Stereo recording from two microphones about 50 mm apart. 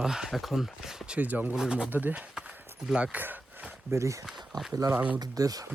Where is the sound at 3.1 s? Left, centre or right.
Right.